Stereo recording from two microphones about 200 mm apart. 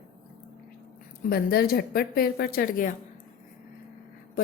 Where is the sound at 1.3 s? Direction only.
50° left (ahead or behind).